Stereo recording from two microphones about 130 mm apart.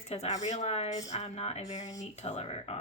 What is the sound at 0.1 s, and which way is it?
Speech, 55° left (ahead or behind).